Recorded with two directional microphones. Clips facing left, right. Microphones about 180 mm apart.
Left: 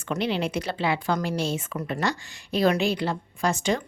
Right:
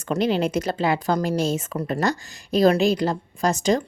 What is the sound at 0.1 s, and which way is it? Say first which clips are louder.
Speech: right 5 dB; 45° right (ahead or behind).